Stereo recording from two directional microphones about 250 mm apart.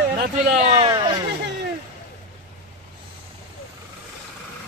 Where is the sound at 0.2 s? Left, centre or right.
Right.